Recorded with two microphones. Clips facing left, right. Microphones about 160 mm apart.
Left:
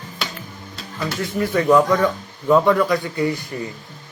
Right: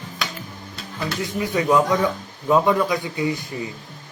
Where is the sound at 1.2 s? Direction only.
15° right (ahead or behind).